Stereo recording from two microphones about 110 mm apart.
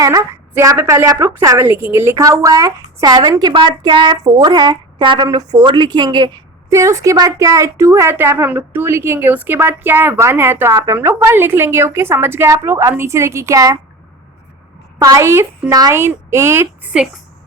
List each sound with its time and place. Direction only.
0.0 s a woman's voice: 35° right (ahead or behind)
6.7 s a woman's voice: 30° right (ahead or behind)
15.1 s a woman's voice: 25° right (ahead or behind)
16.9 s speech: 10° right (ahead or behind)